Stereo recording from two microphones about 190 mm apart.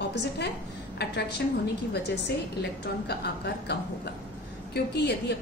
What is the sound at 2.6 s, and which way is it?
A woman's voice, 60° left (ahead or behind).